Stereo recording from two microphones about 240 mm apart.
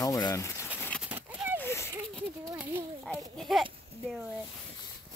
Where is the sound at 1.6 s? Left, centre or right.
Centre.